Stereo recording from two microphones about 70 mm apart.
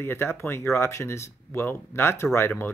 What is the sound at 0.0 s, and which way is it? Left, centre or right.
Speech, left.